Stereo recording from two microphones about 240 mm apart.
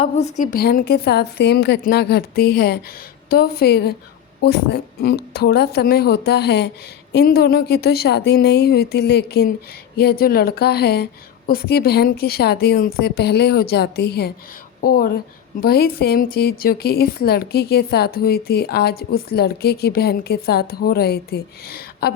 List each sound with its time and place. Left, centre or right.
0.0 s a woman's voice: left